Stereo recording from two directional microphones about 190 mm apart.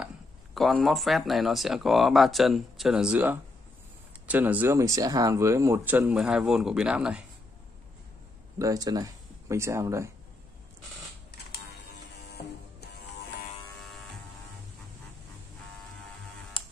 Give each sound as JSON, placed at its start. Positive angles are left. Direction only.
{"t": 0.6, "sound": "speech", "side_deg": 0}
{"t": 8.5, "sound": "speech", "side_deg": -20}